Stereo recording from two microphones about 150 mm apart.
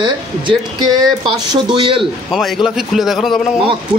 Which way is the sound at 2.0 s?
Centre (ahead or behind).